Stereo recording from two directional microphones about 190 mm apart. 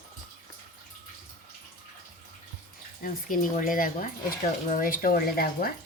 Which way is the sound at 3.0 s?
45° left (ahead or behind).